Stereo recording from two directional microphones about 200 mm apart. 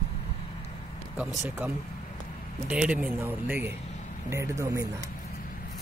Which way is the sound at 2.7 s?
5° right (ahead or behind).